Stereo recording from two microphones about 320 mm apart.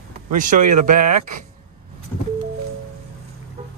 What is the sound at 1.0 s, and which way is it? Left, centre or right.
Speech, right.